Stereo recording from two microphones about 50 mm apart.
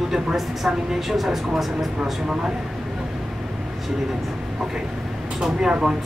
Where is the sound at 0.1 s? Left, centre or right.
Centre.